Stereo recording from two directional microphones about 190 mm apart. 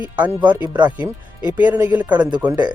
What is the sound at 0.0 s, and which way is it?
Speech, 10° right (ahead or behind).